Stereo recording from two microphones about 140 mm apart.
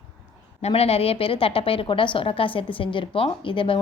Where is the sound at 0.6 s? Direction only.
45° left (ahead or behind).